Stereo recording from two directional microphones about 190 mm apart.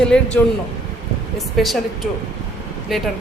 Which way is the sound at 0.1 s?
5° left (ahead or behind).